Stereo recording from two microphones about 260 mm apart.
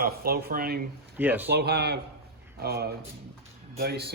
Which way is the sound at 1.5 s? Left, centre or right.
Right.